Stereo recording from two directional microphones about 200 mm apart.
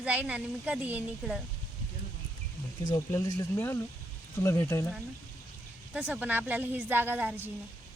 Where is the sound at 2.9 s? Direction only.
15° left (ahead or behind).